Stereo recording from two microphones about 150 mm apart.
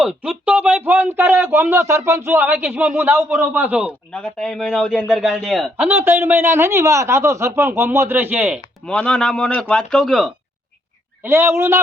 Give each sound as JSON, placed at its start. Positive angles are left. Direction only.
{"t": 0.0, "sound": "speech", "side_deg": -5}
{"t": 4.1, "sound": "speech", "side_deg": 5}
{"t": 5.7, "sound": "speech", "side_deg": -15}
{"t": 8.9, "sound": "speech", "side_deg": 5}
{"t": 11.2, "sound": "speech", "side_deg": -15}